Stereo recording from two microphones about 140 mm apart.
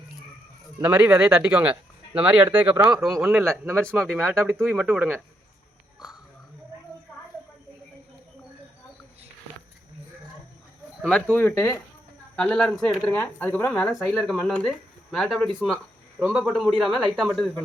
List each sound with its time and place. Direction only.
0.8 s speech: 10° right (ahead or behind)
2.9 s speech: 5° right (ahead or behind)
3.4 s speech: 20° right (ahead or behind)
4.0 s speech: centre (ahead or behind)
4.3 s speech: 15° right (ahead or behind)
4.6 s speech: centre (ahead or behind)
11.0 s speech: 10° left (ahead or behind)
12.4 s speech: 5° left (ahead or behind)